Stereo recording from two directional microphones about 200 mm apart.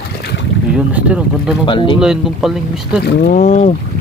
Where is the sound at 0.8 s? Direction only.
5° right (ahead or behind).